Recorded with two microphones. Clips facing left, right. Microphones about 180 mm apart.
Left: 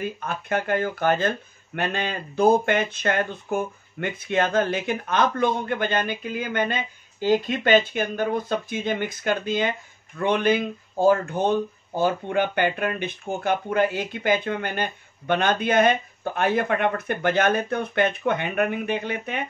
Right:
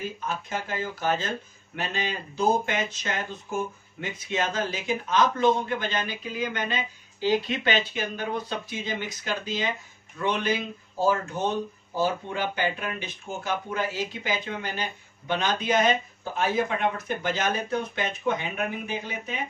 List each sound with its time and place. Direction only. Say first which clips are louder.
0.0 s speech: left 3 dB; 60° left (ahead or behind)